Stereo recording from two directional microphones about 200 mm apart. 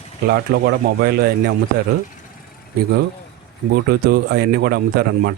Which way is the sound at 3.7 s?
50° right (ahead or behind).